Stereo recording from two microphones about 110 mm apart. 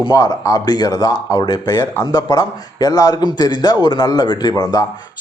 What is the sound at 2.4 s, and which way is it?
Speech, 35° left (ahead or behind).